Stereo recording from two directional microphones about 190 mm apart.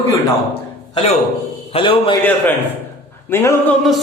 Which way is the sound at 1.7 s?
25° left (ahead or behind).